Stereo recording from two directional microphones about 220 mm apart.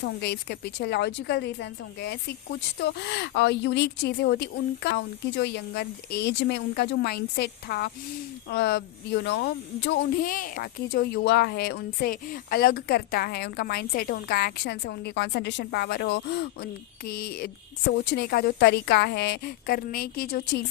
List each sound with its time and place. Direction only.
0.0 s speech: 50° left (ahead or behind)